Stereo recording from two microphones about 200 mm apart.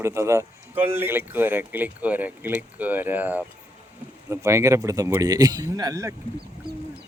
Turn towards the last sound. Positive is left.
turn(degrees=-15)  # may be behind; listen again after turning